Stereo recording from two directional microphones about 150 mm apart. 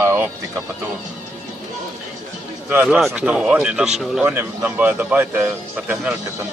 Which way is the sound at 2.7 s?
10° right (ahead or behind).